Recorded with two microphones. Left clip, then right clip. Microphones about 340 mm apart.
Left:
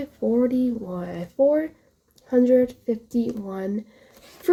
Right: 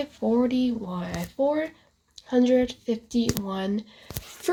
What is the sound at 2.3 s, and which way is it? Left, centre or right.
Speech, centre.